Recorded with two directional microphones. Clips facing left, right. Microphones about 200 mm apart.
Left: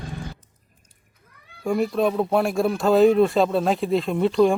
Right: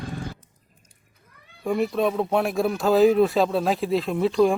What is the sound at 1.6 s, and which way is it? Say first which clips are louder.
Speech: left 1 dB; centre (ahead or behind).